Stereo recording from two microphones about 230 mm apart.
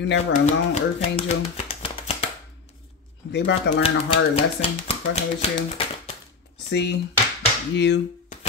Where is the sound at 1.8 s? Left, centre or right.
Left.